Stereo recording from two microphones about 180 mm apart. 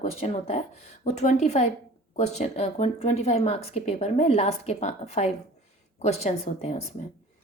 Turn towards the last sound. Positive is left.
turn(degrees=35)  # may be behind; listen again after turning